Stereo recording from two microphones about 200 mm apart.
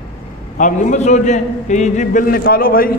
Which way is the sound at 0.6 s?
40° left (ahead or behind).